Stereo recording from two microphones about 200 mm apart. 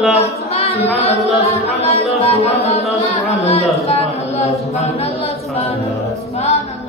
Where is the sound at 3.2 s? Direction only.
30° left (ahead or behind).